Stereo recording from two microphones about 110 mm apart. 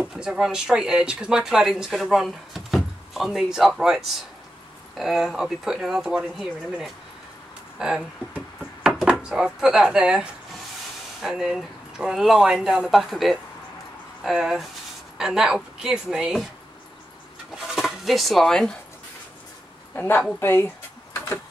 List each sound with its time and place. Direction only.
0.0 s speech: 5° right (ahead or behind)
17.6 s speech: 5° right (ahead or behind)
20.0 s a woman's voice: 20° left (ahead or behind)